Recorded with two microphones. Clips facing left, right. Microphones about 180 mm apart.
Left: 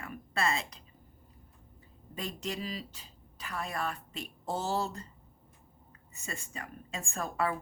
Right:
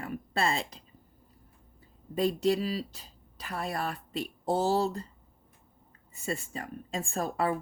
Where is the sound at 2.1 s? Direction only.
35° right (ahead or behind).